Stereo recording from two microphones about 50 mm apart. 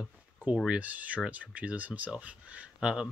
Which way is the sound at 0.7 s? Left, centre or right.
Right.